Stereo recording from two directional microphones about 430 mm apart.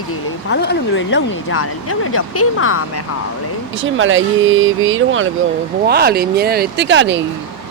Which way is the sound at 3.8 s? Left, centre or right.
Right.